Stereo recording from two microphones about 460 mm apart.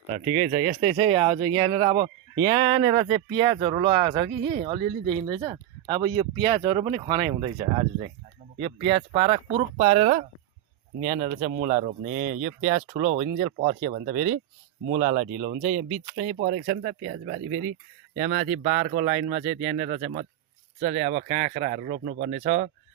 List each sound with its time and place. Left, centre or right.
0.3 s speech: centre